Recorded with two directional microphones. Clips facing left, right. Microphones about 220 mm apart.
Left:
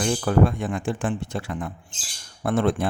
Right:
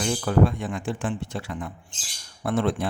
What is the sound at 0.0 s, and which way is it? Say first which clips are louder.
Speech: left 1 dB; 50° left (ahead or behind).